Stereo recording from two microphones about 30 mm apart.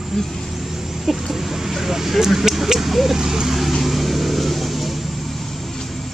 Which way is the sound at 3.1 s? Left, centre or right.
Right.